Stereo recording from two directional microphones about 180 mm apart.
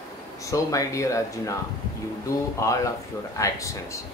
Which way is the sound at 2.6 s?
15° left (ahead or behind).